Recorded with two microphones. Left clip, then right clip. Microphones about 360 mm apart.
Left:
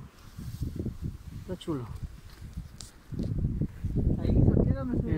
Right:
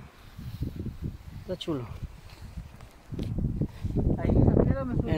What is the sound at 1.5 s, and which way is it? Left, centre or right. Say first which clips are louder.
Speech: right 3 dB; centre.